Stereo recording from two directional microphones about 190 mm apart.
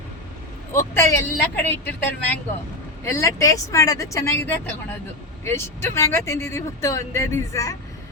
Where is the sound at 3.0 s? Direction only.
15° left (ahead or behind).